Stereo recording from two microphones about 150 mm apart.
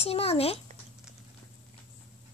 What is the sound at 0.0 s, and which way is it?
Speech, 40° left (ahead or behind).